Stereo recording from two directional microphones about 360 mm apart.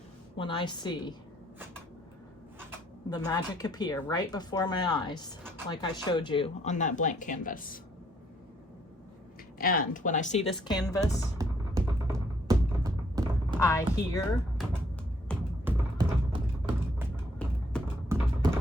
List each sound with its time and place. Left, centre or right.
0.3 s speech: centre
3.1 s speech: centre
9.6 s speech: left
11.3 s music: centre
13.6 s speech: centre
15.3 s music: centre
17.0 s a sound: centre